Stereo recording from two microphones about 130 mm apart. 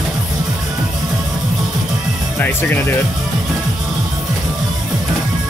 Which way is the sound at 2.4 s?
15° left (ahead or behind).